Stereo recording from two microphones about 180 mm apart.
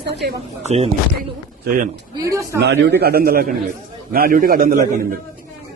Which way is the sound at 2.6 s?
70° right (ahead or behind).